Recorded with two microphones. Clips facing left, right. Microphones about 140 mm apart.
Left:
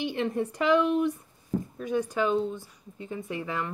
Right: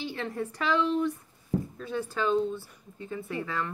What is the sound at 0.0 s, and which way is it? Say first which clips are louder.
A woman's voice: left 5 dB; 20° left (ahead or behind).